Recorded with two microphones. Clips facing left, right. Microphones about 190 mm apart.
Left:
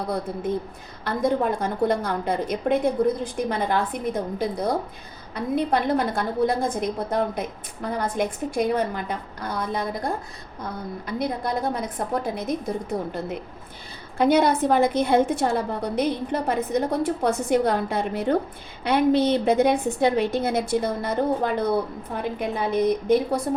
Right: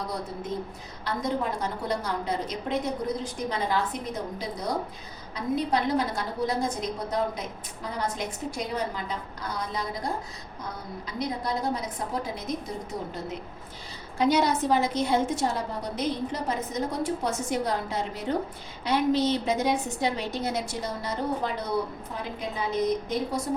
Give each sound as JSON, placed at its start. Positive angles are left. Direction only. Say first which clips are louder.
{"t": 1.0, "sound": "a woman's voice", "louder": "left 6 dB", "side_deg": 55}
{"t": 5.3, "sound": "a woman's voice", "louder": "left 3 dB", "side_deg": 55}